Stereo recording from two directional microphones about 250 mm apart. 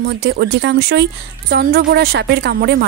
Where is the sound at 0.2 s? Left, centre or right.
Right.